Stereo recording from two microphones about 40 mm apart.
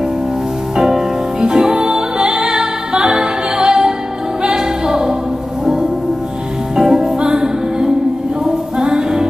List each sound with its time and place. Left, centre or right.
0.7 s music: centre
6.7 s music: centre